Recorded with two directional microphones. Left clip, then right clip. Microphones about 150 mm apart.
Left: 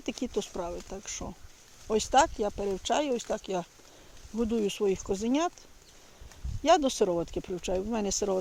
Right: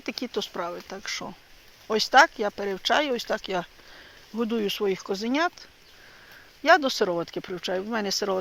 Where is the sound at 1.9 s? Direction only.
10° left (ahead or behind).